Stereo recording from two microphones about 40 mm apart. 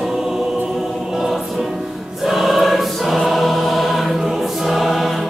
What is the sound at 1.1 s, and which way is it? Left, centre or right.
Choir, centre.